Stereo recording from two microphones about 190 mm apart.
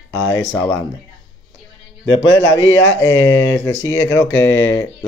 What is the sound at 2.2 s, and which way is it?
Speech, 85° left.